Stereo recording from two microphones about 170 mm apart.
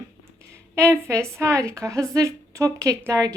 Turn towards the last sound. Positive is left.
turn(degrees=-20)  # may be behind; listen again after turning